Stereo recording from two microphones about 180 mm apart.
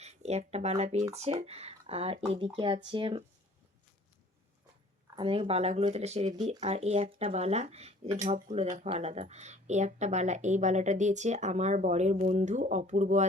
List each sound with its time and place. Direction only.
0.0 s speech: 35° right (ahead or behind)
5.1 s speech: 30° right (ahead or behind)